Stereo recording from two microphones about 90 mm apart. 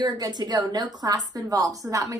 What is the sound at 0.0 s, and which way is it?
A woman's voice, 50° right (ahead or behind).